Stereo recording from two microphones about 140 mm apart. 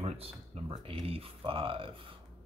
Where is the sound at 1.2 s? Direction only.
40° right (ahead or behind).